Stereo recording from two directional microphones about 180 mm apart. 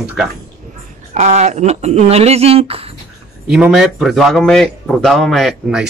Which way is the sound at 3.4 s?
5° right (ahead or behind).